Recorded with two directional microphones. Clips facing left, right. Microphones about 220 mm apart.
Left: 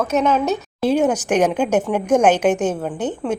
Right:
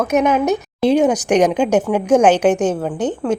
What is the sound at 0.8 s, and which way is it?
A woman's voice, 5° left (ahead or behind).